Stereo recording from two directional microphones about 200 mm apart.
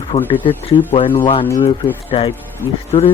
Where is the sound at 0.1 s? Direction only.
30° left (ahead or behind).